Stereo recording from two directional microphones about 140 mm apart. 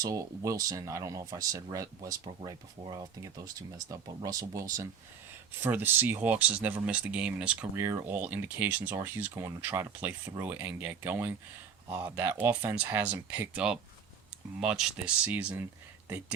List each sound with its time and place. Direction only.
0.0 s speech: 25° right (ahead or behind)